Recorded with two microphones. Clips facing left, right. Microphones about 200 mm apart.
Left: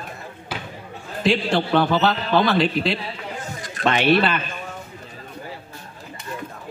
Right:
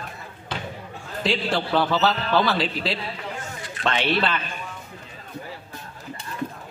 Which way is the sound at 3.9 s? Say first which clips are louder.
Left 7 dB; 60° left (ahead or behind).